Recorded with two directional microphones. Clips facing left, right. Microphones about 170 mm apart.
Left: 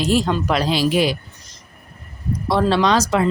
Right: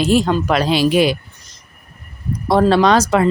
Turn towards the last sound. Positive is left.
turn(degrees=-55)  # may be behind; listen again after turning